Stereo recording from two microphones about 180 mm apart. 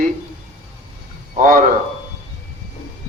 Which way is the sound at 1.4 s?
50° right (ahead or behind).